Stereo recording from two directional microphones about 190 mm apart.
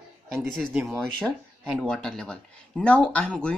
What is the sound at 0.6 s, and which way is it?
Speech, centre (ahead or behind).